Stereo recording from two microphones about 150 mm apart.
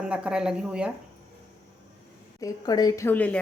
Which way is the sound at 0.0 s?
5° right (ahead or behind).